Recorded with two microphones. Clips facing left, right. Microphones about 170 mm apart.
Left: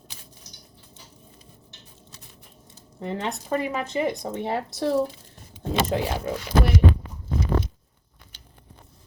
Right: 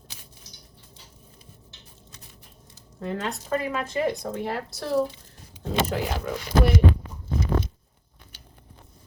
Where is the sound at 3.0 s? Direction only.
20° left (ahead or behind).